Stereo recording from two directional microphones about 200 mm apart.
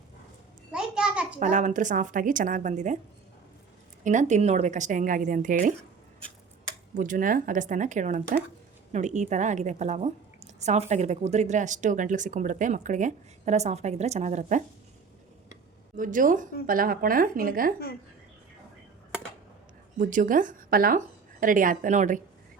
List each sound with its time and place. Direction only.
0.7 s a sound: 5° right (ahead or behind)
1.4 s a woman's voice: 35° right (ahead or behind)
4.0 s a woman's voice: 40° right (ahead or behind)
6.9 s a woman's voice: 40° right (ahead or behind)
16.0 s a woman's voice: 40° right (ahead or behind)
20.0 s a woman's voice: 40° right (ahead or behind)